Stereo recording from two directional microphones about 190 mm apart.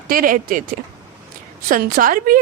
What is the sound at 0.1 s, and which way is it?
Speech, 50° right (ahead or behind).